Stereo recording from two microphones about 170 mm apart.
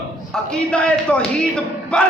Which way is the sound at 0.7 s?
5° left (ahead or behind).